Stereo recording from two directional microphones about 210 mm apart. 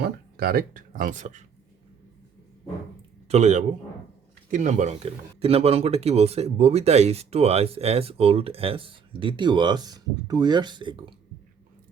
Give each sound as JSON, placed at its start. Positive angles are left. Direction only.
{"t": 0.0, "sound": "speech", "side_deg": -45}
{"t": 3.2, "sound": "speech", "side_deg": -30}